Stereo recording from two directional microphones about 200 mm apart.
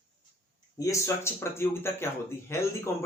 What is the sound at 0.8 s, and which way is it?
Speech, 15° left (ahead or behind).